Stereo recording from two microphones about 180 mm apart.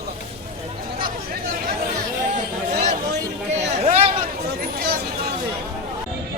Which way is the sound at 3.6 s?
35° right (ahead or behind).